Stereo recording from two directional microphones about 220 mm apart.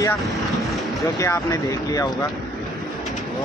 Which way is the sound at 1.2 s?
15° left (ahead or behind).